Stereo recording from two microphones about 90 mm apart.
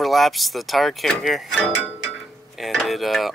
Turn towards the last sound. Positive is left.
turn(degrees=0)  # may be behind; listen again after turning